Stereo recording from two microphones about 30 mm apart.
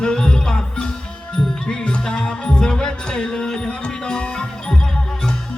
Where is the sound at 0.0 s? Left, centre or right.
Left.